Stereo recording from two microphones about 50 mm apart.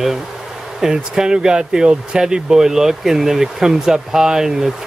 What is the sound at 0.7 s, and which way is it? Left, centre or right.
Speech, centre.